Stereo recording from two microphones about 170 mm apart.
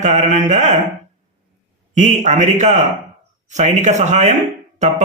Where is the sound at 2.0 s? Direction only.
45° right (ahead or behind).